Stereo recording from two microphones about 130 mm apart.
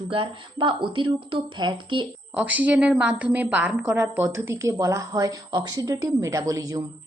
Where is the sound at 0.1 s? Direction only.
40° right (ahead or behind).